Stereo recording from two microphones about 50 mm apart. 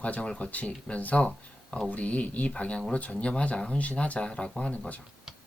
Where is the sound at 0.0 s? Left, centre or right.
Left.